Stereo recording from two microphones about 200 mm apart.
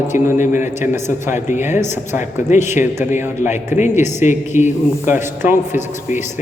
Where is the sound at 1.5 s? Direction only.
35° left (ahead or behind).